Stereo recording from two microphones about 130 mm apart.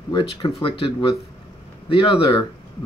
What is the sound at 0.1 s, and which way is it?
Speech, 40° left (ahead or behind).